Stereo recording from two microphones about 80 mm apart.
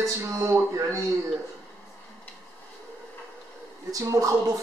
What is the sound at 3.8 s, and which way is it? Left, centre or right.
Speech, right.